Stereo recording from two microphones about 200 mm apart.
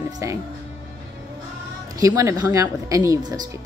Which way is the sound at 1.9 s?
15° right (ahead or behind).